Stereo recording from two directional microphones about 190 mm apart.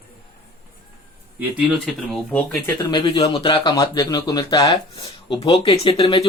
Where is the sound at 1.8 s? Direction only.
5° left (ahead or behind).